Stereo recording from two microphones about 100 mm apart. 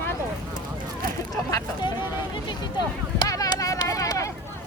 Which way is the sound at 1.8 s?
50° left (ahead or behind).